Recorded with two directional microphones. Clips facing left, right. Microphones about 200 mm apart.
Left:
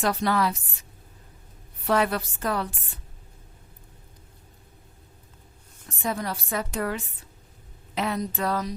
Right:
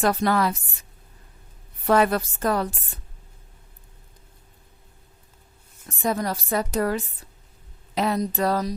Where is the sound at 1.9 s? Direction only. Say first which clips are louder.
Right 4 dB; 45° right (ahead or behind).